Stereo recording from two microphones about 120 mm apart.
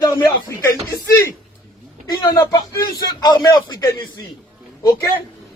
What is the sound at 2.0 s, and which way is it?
A man's voice, 35° left (ahead or behind).